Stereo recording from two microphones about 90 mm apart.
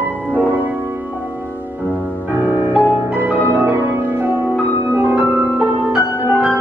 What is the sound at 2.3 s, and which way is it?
Music, 20° right (ahead or behind).